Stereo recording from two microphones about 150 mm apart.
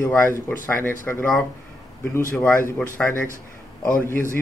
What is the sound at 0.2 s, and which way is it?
Speech, 15° left (ahead or behind).